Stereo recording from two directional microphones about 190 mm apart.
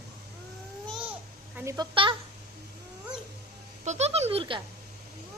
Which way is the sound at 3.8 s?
35° right (ahead or behind).